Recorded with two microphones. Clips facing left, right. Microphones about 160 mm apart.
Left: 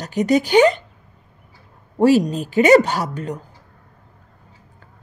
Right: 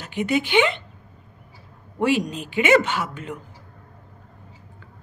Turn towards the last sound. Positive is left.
turn(degrees=40)  # may be behind; listen again after turning